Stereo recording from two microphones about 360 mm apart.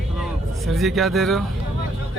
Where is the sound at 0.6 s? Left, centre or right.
Centre.